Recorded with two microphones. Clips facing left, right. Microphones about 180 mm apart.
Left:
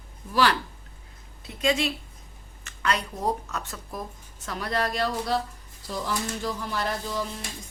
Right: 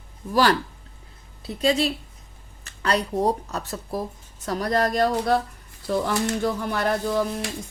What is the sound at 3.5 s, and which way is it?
Speech, 35° right (ahead or behind).